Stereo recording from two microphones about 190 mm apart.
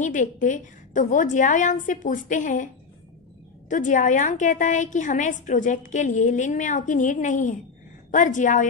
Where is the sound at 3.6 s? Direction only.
40° left (ahead or behind).